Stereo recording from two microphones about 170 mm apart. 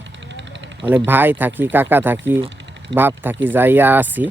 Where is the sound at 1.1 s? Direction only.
10° right (ahead or behind).